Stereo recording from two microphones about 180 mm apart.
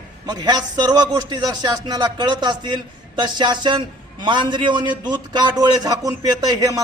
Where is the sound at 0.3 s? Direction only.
25° right (ahead or behind).